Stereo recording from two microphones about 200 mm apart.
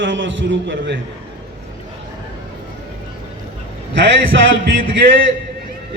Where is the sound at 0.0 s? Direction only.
70° right (ahead or behind).